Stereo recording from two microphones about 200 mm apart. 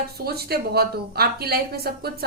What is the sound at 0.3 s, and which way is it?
A woman's voice, 50° right (ahead or behind).